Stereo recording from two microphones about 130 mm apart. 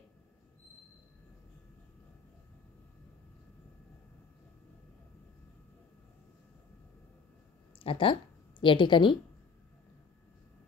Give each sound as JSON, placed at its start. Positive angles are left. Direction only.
{"t": 7.8, "sound": "a woman's voice", "side_deg": 45}